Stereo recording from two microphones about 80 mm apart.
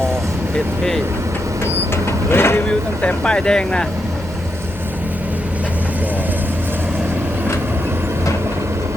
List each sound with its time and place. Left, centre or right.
2.0 s vehicle: left
2.6 s speech: centre